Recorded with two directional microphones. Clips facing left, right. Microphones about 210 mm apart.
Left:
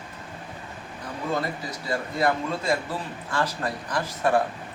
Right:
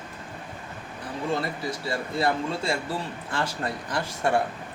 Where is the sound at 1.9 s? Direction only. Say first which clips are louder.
Left 2 dB; 30° right (ahead or behind).